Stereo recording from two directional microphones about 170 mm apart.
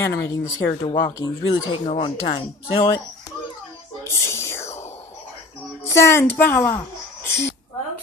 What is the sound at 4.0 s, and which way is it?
Whispering, 15° left (ahead or behind).